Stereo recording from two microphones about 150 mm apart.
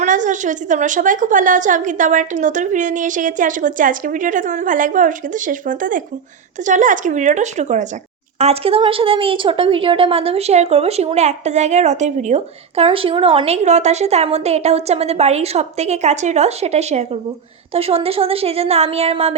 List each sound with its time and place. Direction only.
0.0 s a woman's voice: 55° right (ahead or behind)
8.4 s a woman's voice: 40° right (ahead or behind)